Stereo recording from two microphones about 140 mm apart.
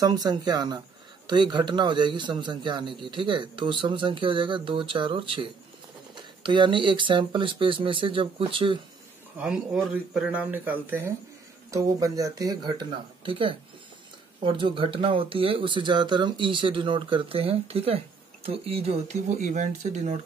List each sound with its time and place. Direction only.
0.0 s speech: 25° right (ahead or behind)
9.4 s speech: 5° right (ahead or behind)
11.7 s speech: 25° right (ahead or behind); by 20.2 s 55° right (ahead or behind)